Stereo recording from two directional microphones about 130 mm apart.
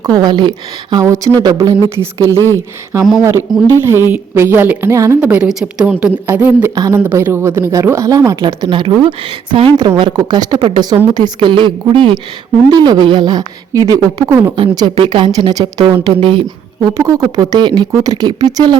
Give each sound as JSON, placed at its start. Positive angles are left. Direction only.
{"t": 0.0, "sound": "speech", "side_deg": -30}
{"t": 1.0, "sound": "speech", "side_deg": -25}
{"t": 3.0, "sound": "speech", "side_deg": 0}
{"t": 3.8, "sound": "a woman's voice", "side_deg": -20}
{"t": 5.2, "sound": "a woman's voice", "side_deg": -10}
{"t": 8.6, "sound": "speech", "side_deg": -40}
{"t": 14.5, "sound": "speech", "side_deg": -40}
{"t": 17.0, "sound": "speech", "side_deg": -25}